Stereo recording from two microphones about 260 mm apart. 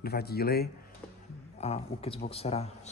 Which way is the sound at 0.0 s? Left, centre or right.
Left.